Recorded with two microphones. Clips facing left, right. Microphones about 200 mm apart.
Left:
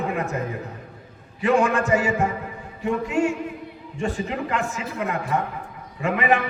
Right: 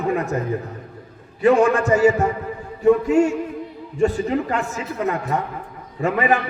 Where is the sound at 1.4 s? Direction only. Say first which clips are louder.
Right 5 dB; 40° right (ahead or behind).